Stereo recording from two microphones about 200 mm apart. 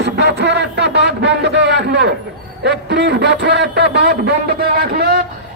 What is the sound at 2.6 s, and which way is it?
A man's voice, 60° right (ahead or behind).